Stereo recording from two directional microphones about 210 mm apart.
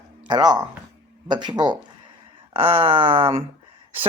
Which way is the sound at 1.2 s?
20° right (ahead or behind).